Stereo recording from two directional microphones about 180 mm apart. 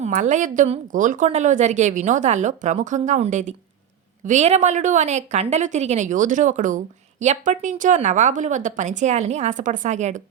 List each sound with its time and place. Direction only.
0.0 s a woman's voice: 40° right (ahead or behind)